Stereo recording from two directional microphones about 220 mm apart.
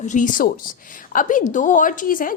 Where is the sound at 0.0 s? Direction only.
35° left (ahead or behind).